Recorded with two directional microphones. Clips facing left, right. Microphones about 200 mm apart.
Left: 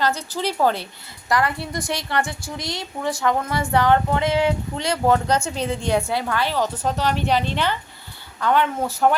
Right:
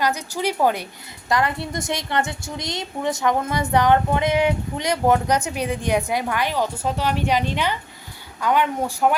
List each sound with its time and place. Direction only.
0.0 s a woman's voice: 15° right (ahead or behind)